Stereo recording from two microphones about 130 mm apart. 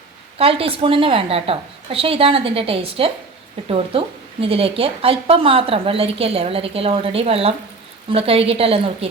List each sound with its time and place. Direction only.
0.3 s a woman's voice: 45° right (ahead or behind)